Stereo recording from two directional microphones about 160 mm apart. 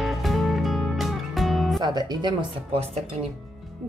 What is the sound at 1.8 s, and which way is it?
Speech, 25° right (ahead or behind).